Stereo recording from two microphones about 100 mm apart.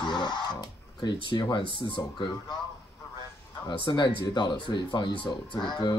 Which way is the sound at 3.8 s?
50° left (ahead or behind).